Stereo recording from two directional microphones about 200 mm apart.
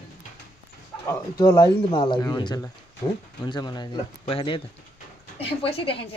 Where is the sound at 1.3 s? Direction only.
15° left (ahead or behind).